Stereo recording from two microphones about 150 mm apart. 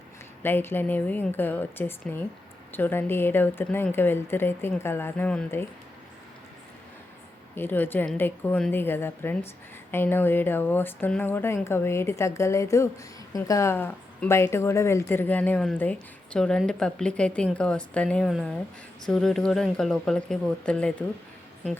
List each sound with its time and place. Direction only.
0.4 s a woman's voice: 15° left (ahead or behind)
7.5 s a woman's voice: 15° left (ahead or behind)